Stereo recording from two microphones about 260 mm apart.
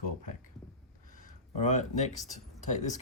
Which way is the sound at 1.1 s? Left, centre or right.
Left.